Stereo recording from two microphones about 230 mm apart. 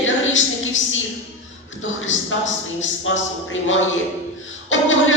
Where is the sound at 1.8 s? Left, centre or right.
Left.